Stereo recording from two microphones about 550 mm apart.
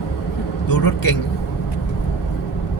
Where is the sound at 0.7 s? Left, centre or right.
Left.